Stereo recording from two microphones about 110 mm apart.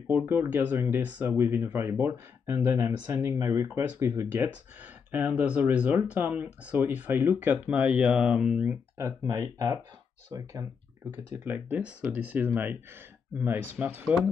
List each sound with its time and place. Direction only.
0.2 s speech: 20° right (ahead or behind)
5.5 s speech: 10° right (ahead or behind)
8.9 s speech: 25° right (ahead or behind)
11.1 s speech: 15° right (ahead or behind)